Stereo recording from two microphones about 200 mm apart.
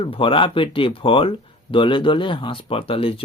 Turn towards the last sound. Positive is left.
turn(degrees=25)  # may be behind; listen again after turning